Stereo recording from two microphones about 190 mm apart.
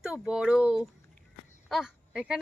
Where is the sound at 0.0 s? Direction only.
5° right (ahead or behind).